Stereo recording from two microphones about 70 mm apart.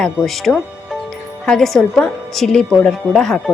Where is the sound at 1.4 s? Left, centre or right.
Centre.